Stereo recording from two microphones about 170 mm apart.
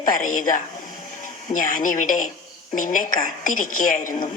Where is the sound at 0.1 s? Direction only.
50° left (ahead or behind).